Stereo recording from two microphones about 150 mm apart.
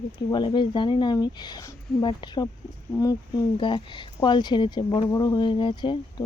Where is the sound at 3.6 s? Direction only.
35° left (ahead or behind).